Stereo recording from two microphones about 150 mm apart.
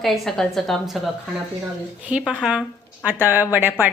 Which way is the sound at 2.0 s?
10° right (ahead or behind).